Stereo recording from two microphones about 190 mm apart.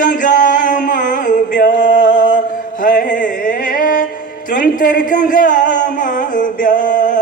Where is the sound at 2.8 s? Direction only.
45° left (ahead or behind).